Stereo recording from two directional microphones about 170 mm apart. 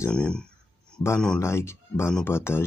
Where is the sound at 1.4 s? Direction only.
15° left (ahead or behind).